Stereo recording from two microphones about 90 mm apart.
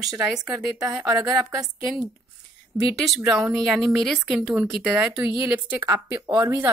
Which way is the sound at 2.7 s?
10° right (ahead or behind).